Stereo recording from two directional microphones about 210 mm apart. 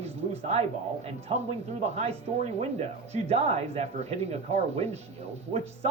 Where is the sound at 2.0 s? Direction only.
30° right (ahead or behind).